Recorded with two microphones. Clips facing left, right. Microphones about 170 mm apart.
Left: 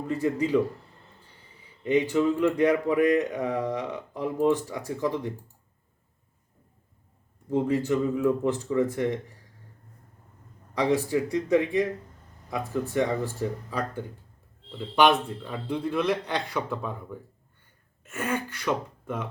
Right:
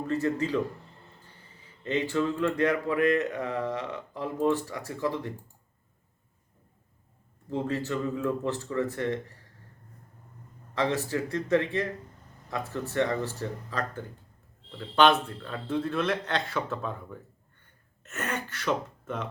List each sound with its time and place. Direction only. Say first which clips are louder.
0.1 s speech: left 3 dB; 15° left (ahead or behind)
1.8 s speech: left 5 dB; 15° left (ahead or behind)
7.5 s speech: left 6 dB; 15° left (ahead or behind)
10.8 s speech: left 4 dB; 15° left (ahead or behind)